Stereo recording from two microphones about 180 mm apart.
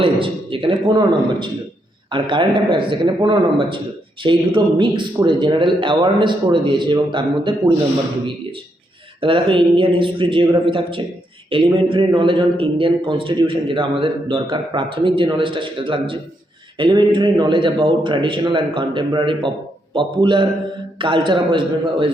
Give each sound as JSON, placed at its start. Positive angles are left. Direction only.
{"t": 0.0, "sound": "a man's voice", "side_deg": -30}
{"t": 9.2, "sound": "a man's voice", "side_deg": -30}